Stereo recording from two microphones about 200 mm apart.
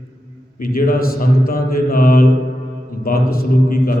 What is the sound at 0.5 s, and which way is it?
A man's voice, 45° left (ahead or behind).